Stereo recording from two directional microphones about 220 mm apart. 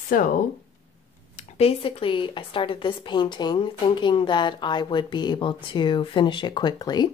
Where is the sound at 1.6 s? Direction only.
25° left (ahead or behind).